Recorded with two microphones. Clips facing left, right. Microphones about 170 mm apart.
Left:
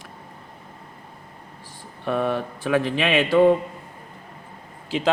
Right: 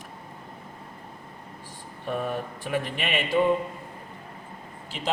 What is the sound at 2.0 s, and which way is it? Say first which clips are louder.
A man's voice: left 6 dB; 90° left.